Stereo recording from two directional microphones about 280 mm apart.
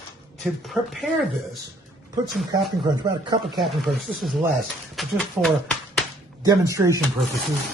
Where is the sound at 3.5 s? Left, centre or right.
Centre.